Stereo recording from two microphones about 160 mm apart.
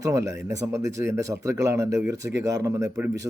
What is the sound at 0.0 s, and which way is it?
Speech, 20° right (ahead or behind).